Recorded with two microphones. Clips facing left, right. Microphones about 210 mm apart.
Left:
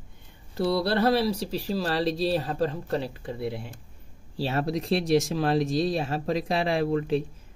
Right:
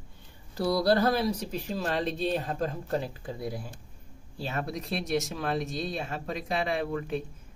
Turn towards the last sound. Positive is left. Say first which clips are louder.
# left 5 dB
turn(degrees=30)  # may be behind; listen again after turning